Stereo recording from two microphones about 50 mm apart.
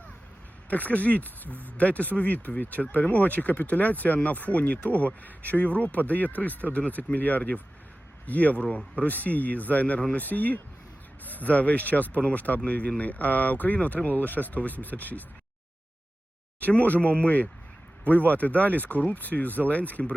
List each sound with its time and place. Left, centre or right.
0.7 s speech: left
16.6 s speech: left